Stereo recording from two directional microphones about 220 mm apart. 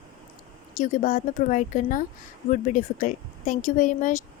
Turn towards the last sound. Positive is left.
turn(degrees=35)  # may be behind; listen again after turning